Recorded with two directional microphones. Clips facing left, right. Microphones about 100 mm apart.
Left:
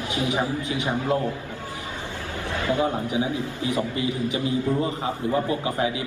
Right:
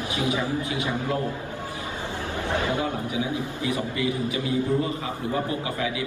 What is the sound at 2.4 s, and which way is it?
Speech, 20° right (ahead or behind).